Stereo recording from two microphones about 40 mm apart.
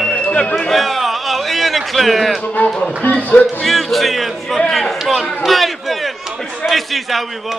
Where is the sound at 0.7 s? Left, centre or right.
Centre.